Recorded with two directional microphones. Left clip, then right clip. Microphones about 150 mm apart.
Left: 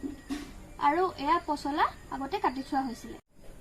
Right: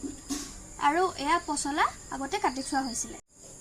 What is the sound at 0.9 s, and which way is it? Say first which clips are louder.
A woman's voice: right 1 dB; 10° right (ahead or behind).